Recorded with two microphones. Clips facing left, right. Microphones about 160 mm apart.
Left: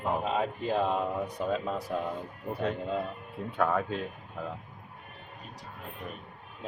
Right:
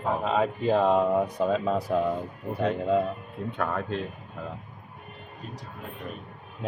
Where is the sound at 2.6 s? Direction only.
90° right.